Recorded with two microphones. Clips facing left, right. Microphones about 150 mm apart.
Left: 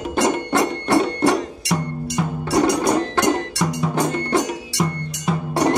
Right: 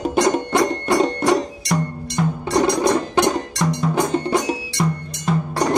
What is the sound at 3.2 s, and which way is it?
Music, 15° right (ahead or behind).